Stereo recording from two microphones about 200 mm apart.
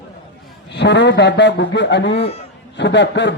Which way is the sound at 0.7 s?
60° left (ahead or behind).